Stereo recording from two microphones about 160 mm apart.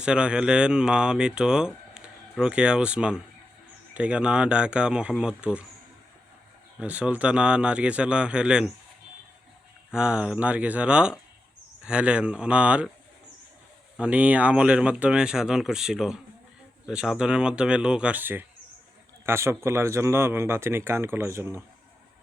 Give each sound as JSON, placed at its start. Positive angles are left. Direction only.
{"t": 0.0, "sound": "speech", "side_deg": -5}
{"t": 6.7, "sound": "speech", "side_deg": -5}
{"t": 9.9, "sound": "speech", "side_deg": -5}
{"t": 13.9, "sound": "speech", "side_deg": -10}